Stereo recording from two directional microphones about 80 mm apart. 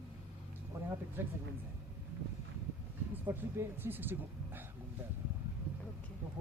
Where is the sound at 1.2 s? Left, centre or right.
Right.